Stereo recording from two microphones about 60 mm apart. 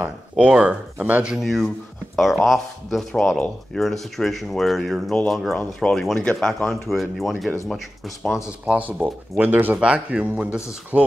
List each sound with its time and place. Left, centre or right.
0.0 s speech: centre
1.3 s speech: centre
8.6 s speech: right
9.8 s speech: centre